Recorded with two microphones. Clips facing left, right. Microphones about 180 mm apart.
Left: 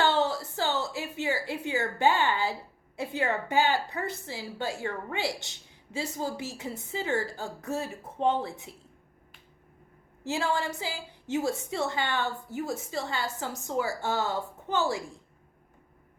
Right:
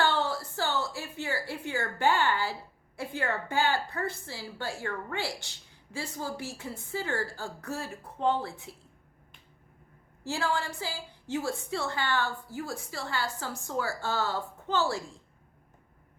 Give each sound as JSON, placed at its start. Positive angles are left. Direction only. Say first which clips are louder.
{"t": 0.0, "sound": "a sound", "louder": "left 3 dB", "side_deg": 20}
{"t": 3.2, "sound": "a woman's voice", "louder": "left 3 dB", "side_deg": 20}
{"t": 10.2, "sound": "a woman's voice", "louder": "left 2 dB", "side_deg": 20}